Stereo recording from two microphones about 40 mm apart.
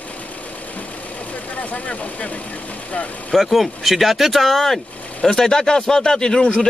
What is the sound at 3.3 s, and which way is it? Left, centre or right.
Speech, centre.